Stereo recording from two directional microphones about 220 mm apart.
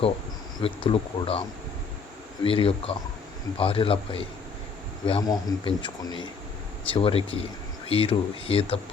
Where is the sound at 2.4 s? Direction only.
25° left (ahead or behind).